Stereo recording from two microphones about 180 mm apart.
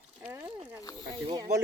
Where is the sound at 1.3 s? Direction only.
20° right (ahead or behind).